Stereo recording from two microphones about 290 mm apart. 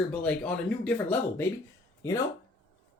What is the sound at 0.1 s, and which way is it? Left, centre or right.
Speech, centre.